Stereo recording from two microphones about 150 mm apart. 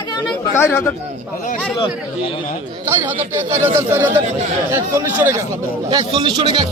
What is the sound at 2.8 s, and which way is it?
Speech, 15° right (ahead or behind).